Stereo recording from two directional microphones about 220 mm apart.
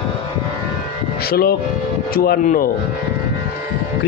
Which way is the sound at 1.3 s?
45° left (ahead or behind).